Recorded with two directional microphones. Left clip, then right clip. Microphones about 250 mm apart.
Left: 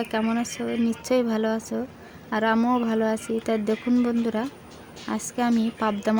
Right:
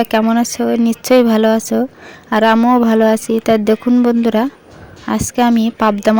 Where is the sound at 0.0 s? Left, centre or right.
Right.